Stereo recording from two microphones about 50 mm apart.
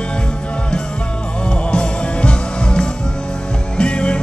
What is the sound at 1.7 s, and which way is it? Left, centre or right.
Music, centre.